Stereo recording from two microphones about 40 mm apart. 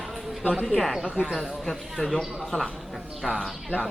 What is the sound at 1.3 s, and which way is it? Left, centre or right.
Speech, centre.